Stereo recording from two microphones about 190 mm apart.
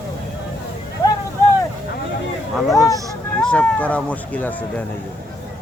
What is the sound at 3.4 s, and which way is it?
Speech, 5° left (ahead or behind).